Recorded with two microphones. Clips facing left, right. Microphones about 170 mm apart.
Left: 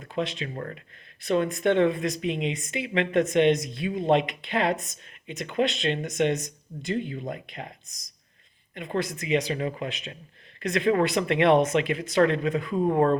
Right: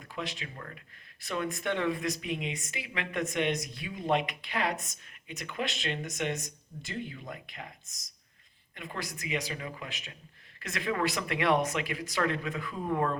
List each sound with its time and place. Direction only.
0.1 s speech: 25° left (ahead or behind)
0.5 s speech: 40° left (ahead or behind)
1.3 s speech: 20° left (ahead or behind)
7.9 s speech: centre (ahead or behind)
8.9 s speech: 25° left (ahead or behind)